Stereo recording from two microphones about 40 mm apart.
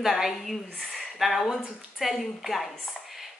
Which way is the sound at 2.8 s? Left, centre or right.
Centre.